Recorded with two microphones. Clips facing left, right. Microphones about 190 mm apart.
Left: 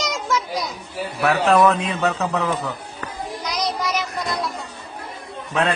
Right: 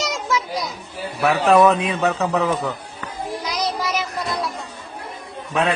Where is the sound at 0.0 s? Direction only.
Centre (ahead or behind).